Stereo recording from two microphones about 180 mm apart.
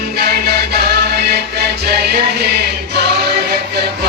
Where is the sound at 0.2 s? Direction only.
60° right (ahead or behind).